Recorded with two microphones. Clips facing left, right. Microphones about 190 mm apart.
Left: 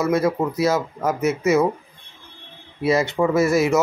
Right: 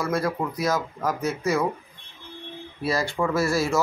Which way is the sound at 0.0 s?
20° left (ahead or behind).